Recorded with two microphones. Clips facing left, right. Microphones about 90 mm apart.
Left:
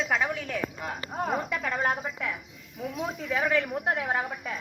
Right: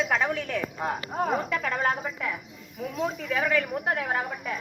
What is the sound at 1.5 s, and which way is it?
A woman's voice, 10° left (ahead or behind).